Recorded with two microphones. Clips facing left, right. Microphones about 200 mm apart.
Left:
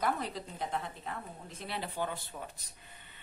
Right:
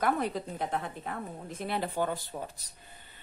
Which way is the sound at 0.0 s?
55° right (ahead or behind).